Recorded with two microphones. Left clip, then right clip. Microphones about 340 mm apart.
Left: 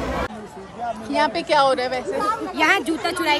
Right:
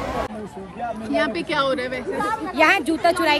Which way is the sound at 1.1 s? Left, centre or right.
Centre.